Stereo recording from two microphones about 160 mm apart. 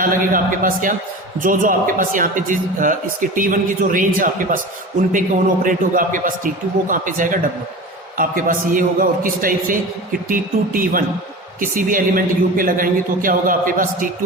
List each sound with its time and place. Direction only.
0.0 s a man's voice: 55° right (ahead or behind)
5.6 s a man's voice: 55° right (ahead or behind)